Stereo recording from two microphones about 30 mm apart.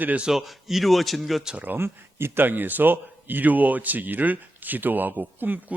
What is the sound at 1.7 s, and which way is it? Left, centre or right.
Speech, right.